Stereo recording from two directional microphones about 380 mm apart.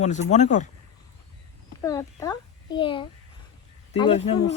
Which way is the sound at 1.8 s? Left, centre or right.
Centre.